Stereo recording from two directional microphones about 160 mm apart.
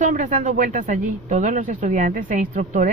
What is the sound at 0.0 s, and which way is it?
Speech, 50° right (ahead or behind).